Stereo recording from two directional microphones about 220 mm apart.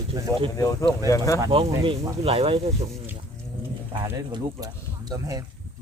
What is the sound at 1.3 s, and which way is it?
Speech, 20° right (ahead or behind).